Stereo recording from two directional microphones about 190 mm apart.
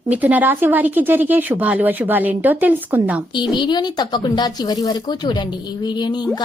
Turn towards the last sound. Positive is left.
turn(degrees=20)  # may be behind; listen again after turning